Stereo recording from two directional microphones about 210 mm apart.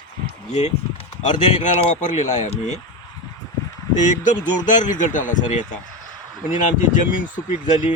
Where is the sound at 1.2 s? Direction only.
35° left (ahead or behind).